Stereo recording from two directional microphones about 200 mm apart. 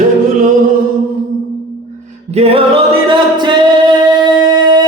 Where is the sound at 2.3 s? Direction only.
30° right (ahead or behind).